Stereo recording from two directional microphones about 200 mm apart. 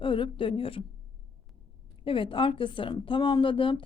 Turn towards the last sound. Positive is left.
turn(degrees=25)  # may be behind; listen again after turning